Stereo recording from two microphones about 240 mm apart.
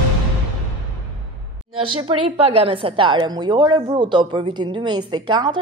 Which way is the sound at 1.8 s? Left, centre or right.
Right.